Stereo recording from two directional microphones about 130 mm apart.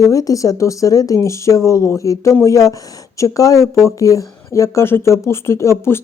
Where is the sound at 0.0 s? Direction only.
25° left (ahead or behind).